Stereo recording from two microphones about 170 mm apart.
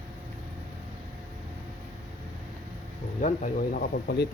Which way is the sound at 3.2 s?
45° left (ahead or behind).